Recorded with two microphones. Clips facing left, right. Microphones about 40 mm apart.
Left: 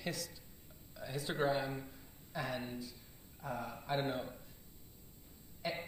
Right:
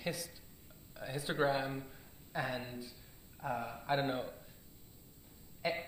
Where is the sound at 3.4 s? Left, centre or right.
Right.